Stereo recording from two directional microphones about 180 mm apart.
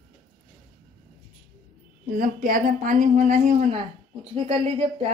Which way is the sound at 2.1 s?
50° right (ahead or behind).